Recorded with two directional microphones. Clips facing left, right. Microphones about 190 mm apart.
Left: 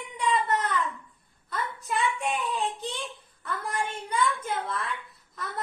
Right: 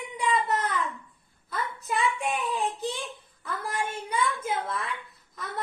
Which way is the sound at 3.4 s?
5° right (ahead or behind).